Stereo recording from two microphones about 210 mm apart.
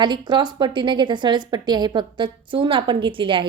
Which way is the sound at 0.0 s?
20° right (ahead or behind).